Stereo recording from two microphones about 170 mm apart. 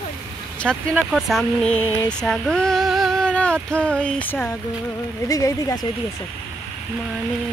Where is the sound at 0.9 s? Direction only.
Centre (ahead or behind).